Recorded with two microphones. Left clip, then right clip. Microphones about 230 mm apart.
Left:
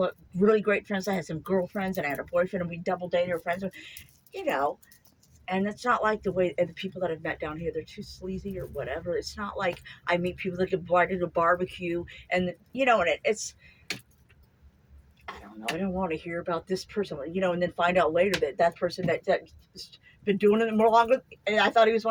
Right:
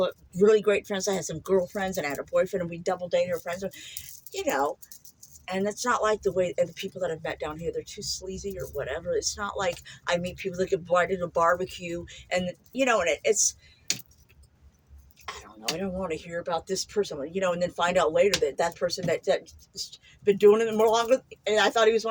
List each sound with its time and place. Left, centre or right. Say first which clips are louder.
0.0 s speech: right 3 dB; right
15.3 s speech: right 1 dB; right